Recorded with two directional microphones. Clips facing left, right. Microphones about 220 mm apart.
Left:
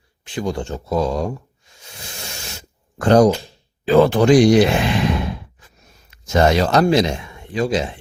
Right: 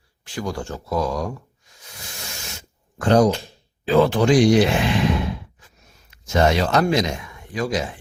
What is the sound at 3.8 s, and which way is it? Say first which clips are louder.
Speech: left 4 dB; 50° left (ahead or behind).